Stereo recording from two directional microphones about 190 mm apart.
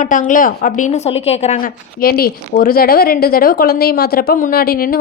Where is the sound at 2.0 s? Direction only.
50° left (ahead or behind).